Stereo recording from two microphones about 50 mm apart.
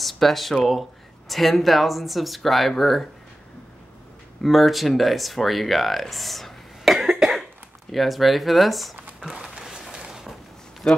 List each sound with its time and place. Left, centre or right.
0.0 s speech: centre
4.4 s speech: centre
7.0 s cough: centre
7.9 s speech: centre
9.2 s a sound: centre
10.8 s speech: centre